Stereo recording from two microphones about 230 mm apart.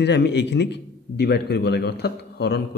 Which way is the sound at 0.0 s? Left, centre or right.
Left.